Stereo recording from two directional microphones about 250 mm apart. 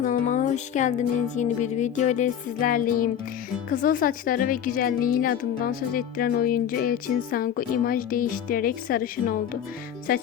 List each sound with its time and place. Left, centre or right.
0.0 s music: left
3.7 s a woman's voice: left